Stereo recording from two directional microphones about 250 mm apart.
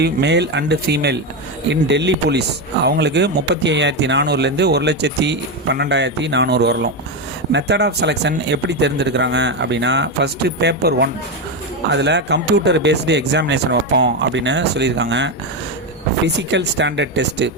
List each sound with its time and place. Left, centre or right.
0.0 s speech: right